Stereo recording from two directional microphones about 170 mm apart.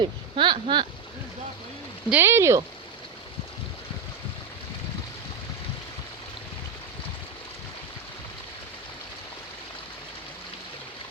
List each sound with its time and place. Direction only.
0.0 s speech: 30° right (ahead or behind)
2.0 s speech: 15° right (ahead or behind)